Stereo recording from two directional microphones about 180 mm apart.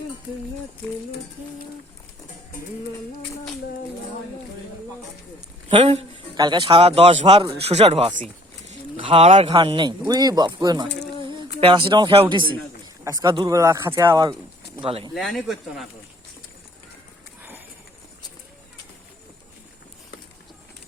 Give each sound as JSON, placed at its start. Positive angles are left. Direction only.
{"t": 5.6, "sound": "speech", "side_deg": -30}
{"t": 15.1, "sound": "speech", "side_deg": 0}